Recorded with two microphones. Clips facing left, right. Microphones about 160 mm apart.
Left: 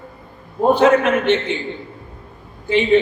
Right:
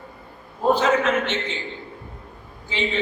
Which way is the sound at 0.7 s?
60° left (ahead or behind).